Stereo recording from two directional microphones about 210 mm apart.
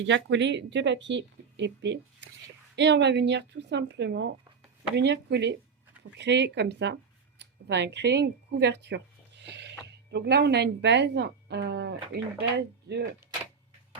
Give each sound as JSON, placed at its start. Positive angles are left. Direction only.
{"t": 0.1, "sound": "speech", "side_deg": -55}